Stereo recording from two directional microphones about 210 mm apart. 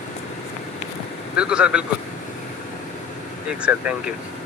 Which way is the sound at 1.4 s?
5° right (ahead or behind).